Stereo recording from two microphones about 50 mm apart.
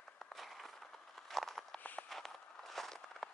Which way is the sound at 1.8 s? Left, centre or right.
Left.